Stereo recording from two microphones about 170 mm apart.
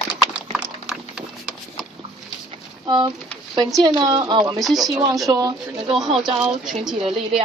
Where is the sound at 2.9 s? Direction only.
25° right (ahead or behind).